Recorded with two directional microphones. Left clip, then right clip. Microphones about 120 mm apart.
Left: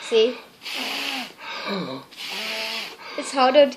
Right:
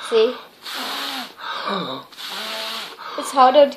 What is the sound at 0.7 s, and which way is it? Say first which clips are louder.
Snort: right 1 dB; 15° left (ahead or behind).